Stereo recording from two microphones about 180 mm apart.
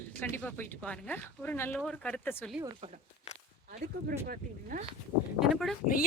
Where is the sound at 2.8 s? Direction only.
30° right (ahead or behind).